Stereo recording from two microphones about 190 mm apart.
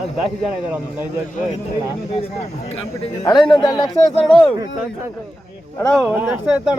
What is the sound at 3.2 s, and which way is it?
Speech, 25° left (ahead or behind).